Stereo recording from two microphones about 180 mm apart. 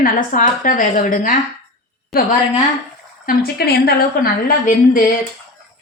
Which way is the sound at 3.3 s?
60° left (ahead or behind).